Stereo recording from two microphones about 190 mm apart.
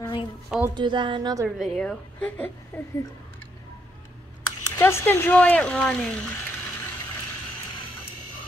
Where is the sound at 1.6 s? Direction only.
Centre (ahead or behind).